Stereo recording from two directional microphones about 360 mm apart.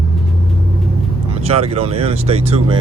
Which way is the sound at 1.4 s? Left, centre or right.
Centre.